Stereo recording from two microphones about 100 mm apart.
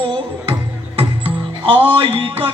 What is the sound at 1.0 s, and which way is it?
Music, 65° right (ahead or behind).